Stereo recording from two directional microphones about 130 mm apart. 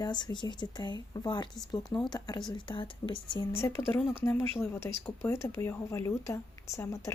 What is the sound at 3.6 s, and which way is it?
Speech, 20° left (ahead or behind).